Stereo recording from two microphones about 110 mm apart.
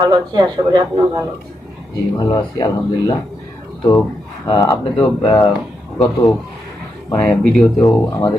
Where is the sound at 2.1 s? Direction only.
40° left (ahead or behind).